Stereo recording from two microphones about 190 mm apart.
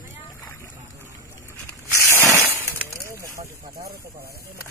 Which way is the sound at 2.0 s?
15° right (ahead or behind).